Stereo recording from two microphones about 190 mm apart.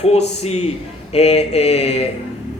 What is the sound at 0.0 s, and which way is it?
Speech, 35° left (ahead or behind).